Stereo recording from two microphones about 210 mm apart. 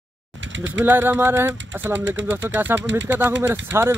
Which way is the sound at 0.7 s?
10° right (ahead or behind).